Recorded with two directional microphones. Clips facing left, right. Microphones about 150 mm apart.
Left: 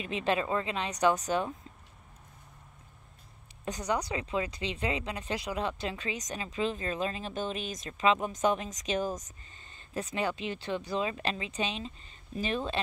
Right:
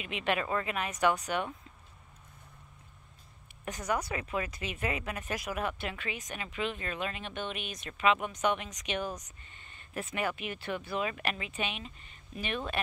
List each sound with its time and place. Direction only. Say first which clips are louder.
0.0 s speech: left 2 dB; 30° left (ahead or behind)
3.9 s speech: left 1 dB; 25° left (ahead or behind)